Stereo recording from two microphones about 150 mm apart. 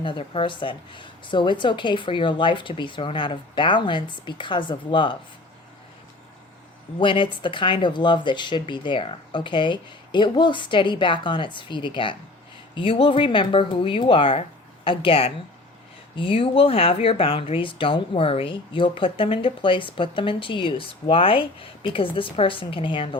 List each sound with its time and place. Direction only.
0.0 s speech: 35° left (ahead or behind)
7.0 s speech: 35° left (ahead or behind)